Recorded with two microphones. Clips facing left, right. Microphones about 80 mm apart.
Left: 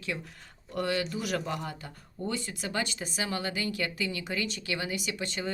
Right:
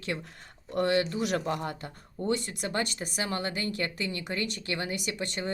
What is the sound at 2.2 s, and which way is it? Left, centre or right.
Speech, right.